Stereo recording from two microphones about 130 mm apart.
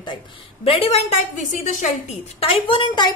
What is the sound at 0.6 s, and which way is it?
Speech, 45° left (ahead or behind).